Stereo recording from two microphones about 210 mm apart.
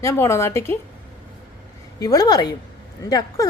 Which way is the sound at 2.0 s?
15° left (ahead or behind).